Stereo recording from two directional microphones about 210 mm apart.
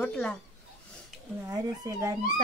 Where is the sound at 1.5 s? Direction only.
15° right (ahead or behind).